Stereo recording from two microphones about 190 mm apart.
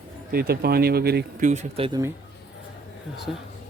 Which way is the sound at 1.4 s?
35° right (ahead or behind).